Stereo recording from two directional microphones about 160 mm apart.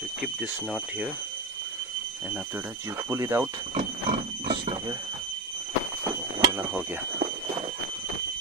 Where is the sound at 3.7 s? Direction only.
50° right (ahead or behind).